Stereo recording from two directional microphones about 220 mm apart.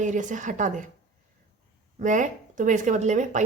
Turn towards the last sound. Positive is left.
turn(degrees=-35)  # may be behind; listen again after turning